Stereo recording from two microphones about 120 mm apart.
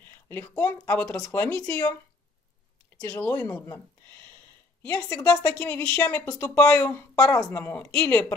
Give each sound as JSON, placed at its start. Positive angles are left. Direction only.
{"t": 0.0, "sound": "speech", "side_deg": 20}
{"t": 3.1, "sound": "speech", "side_deg": 15}